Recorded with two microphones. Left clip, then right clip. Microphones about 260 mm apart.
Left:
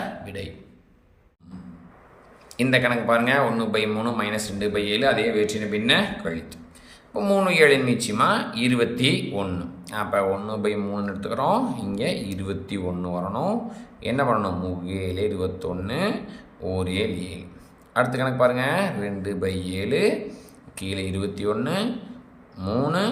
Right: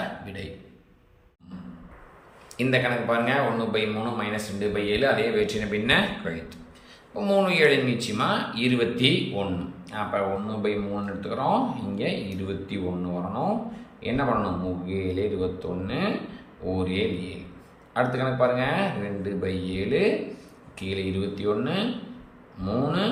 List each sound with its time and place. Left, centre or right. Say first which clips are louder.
0.3 s a man's voice: left 3 dB; centre
2.6 s speech: left 3 dB; centre